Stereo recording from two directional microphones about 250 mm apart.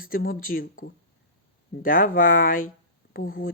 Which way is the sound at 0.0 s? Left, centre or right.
Left.